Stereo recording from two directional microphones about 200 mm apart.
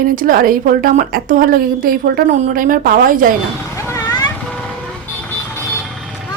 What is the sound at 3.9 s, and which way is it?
Vehicle, 15° left (ahead or behind).